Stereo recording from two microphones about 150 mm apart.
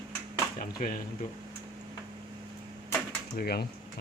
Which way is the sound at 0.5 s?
70° left (ahead or behind).